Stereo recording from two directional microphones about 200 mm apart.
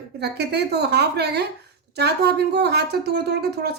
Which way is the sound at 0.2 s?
55° right (ahead or behind).